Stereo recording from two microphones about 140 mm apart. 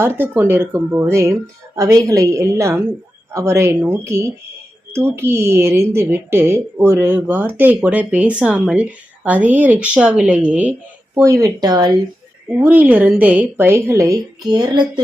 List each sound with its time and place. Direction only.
0.0 s speech: 15° right (ahead or behind)
11.1 s speech: 20° right (ahead or behind)
12.5 s speech: 15° right (ahead or behind); by 15.0 s 30° right (ahead or behind)